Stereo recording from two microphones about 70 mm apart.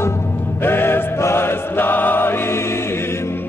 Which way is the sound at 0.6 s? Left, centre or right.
Left.